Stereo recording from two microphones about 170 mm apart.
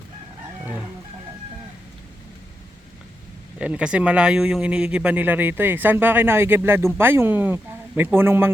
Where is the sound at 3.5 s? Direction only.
5° right (ahead or behind).